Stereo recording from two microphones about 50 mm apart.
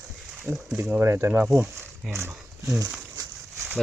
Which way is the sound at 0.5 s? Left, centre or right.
Right.